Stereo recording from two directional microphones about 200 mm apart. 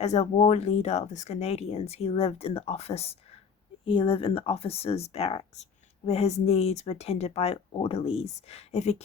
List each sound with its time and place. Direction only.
0.0 s speech: 35° left (ahead or behind)